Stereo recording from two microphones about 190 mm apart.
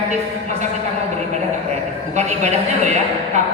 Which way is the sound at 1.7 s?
35° right (ahead or behind).